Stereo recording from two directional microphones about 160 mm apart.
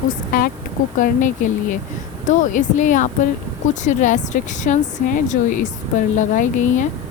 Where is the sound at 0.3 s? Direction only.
60° left (ahead or behind).